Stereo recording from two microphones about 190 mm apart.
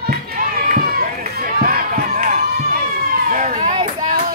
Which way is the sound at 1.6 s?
50° right (ahead or behind).